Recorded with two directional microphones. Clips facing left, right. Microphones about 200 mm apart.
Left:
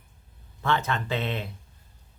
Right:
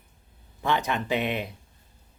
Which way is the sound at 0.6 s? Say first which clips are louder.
Right 1 dB; 15° right (ahead or behind).